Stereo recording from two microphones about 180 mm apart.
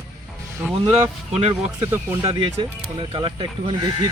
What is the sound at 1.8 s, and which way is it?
Speech, 15° right (ahead or behind).